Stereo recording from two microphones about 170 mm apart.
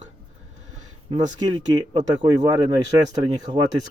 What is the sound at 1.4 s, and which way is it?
Speech, 25° right (ahead or behind).